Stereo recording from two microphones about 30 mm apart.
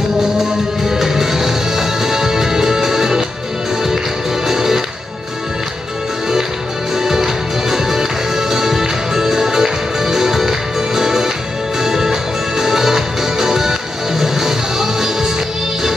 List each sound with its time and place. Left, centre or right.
0.2 s music: centre
4.5 s music: centre
7.0 s music: centre